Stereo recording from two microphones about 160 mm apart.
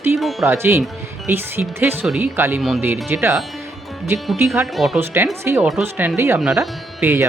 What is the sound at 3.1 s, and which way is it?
Speech, 15° right (ahead or behind).